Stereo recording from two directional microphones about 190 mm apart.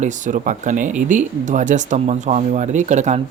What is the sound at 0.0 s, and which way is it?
Speech, 40° right (ahead or behind).